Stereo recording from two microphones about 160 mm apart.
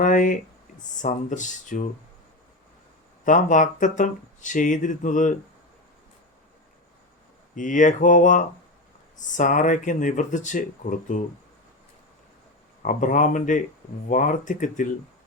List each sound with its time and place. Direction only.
0.0 s speech: 55° left (ahead or behind)
3.2 s speech: 55° left (ahead or behind)
7.5 s speech: 55° left (ahead or behind)
12.8 s speech: 55° left (ahead or behind)